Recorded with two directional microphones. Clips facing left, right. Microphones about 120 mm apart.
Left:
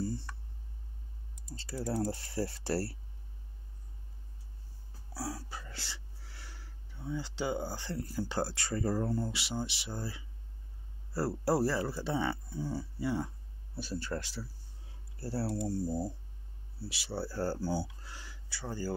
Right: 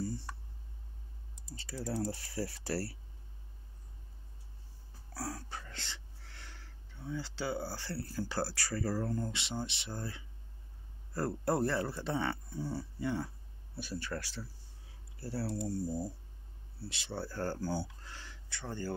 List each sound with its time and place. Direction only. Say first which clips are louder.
1.5 s speech: left 3 dB; 35° left (ahead or behind)
5.1 s a sound: left 1 dB; 5° left (ahead or behind)
9.1 s speech: left 2 dB; 5° left (ahead or behind)
13.7 s speech: left 3 dB; 30° left (ahead or behind)
16.8 s speech: left 3 dB; 5° left (ahead or behind)